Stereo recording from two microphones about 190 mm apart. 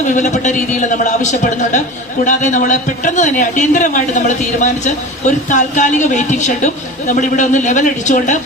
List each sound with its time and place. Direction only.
0.0 s speech: 40° left (ahead or behind)